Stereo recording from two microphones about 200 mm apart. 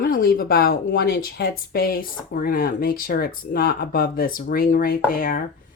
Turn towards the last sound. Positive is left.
turn(degrees=45)  # may be behind; listen again after turning